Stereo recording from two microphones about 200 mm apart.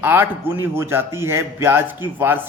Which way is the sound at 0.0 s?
10° right (ahead or behind).